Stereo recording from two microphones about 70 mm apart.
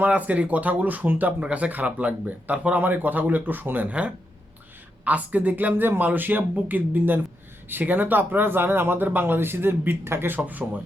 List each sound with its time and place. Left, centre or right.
0.0 s speech: right